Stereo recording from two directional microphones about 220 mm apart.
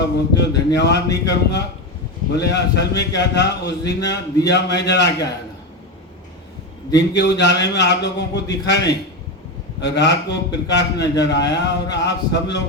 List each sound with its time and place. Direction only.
0.0 s speech: 50° left (ahead or behind)
7.2 s speech: 50° left (ahead or behind)